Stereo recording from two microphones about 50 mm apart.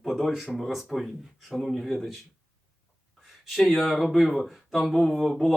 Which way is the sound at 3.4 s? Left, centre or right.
Centre.